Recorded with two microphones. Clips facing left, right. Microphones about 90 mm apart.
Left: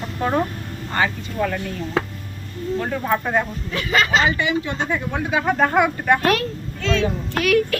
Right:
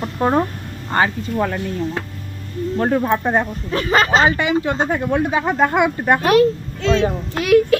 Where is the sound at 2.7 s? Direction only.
40° right (ahead or behind).